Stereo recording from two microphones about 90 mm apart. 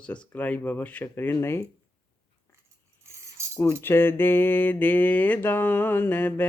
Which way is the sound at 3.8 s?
25° left (ahead or behind).